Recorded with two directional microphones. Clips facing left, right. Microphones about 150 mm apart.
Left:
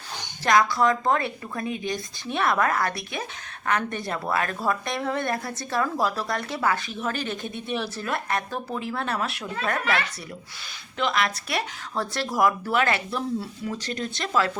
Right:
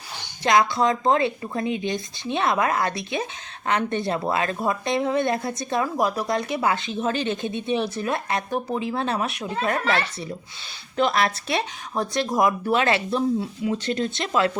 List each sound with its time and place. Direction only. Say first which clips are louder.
0.4 s speech: right 1 dB; 20° right (ahead or behind)
10.9 s speech: right 4 dB; 40° right (ahead or behind)
11.4 s speech: right 3 dB; 20° right (ahead or behind)